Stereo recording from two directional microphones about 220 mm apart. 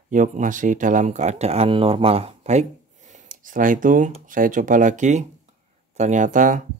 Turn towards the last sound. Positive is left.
turn(degrees=-35)  # may be behind; listen again after turning